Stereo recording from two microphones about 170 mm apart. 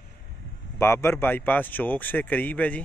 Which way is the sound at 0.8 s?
15° left (ahead or behind).